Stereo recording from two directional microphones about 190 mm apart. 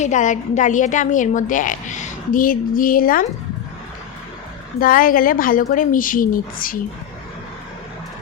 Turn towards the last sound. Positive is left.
turn(degrees=45)  # may be behind; listen again after turning